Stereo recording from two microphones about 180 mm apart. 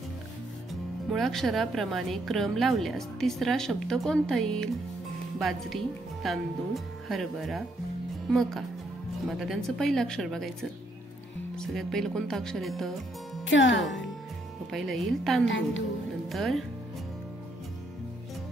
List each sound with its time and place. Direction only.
1.1 s a woman's voice: centre (ahead or behind)
13.5 s speech: 90° left
14.7 s a woman's voice: centre (ahead or behind)
15.4 s a woman's voice: 90° left
16.3 s speech: centre (ahead or behind)